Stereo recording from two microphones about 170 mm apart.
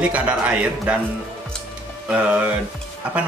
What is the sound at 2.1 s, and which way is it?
Speech, 10° right (ahead or behind).